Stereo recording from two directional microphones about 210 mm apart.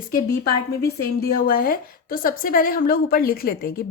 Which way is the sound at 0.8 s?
45° left (ahead or behind).